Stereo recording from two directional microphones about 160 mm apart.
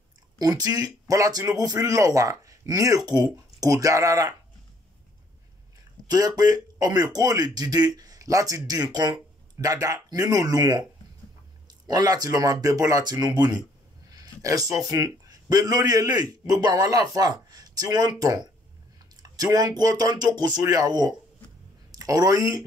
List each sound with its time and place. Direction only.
0.4 s speech: 25° right (ahead or behind)
6.0 s speech: 25° right (ahead or behind)
11.9 s speech: 25° right (ahead or behind)